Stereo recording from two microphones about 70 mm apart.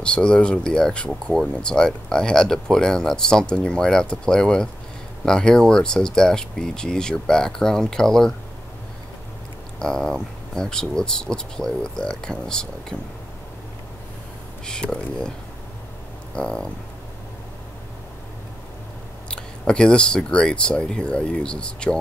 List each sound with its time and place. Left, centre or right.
0.0 s speech: centre
9.8 s speech: centre
14.7 s speech: centre
16.3 s speech: centre
19.2 s speech: centre